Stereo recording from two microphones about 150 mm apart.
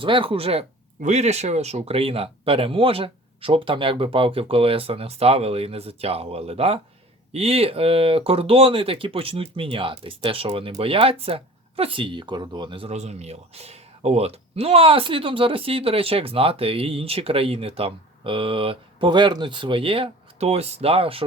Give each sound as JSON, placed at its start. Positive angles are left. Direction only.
{"t": 0.0, "sound": "speech", "side_deg": -35}
{"t": 12.9, "sound": "speech", "side_deg": -45}